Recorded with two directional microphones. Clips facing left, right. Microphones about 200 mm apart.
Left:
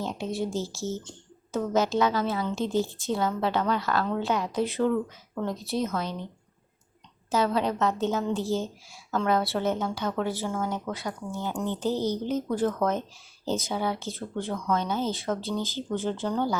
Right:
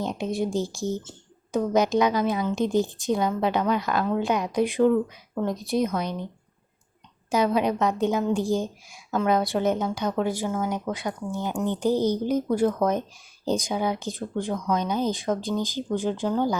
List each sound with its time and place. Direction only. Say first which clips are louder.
0.0 s speech: right 3 dB; 15° right (ahead or behind)
7.3 s speech: right 3 dB; 15° right (ahead or behind)